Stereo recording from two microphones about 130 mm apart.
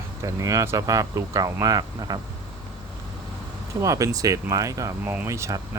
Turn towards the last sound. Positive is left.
turn(degrees=-25)  # may be behind; listen again after turning